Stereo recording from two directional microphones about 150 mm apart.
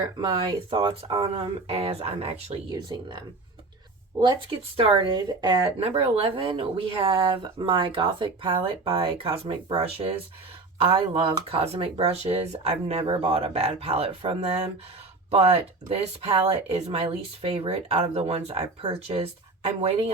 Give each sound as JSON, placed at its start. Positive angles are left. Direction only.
{"t": 0.2, "sound": "speech", "side_deg": -35}
{"t": 2.6, "sound": "speech", "side_deg": -25}
{"t": 4.8, "sound": "speech", "side_deg": -35}